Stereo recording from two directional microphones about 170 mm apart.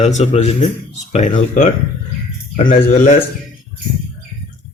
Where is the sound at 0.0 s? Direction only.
40° left (ahead or behind).